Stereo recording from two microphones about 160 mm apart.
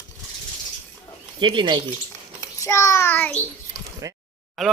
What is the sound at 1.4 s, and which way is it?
Speech, 30° right (ahead or behind).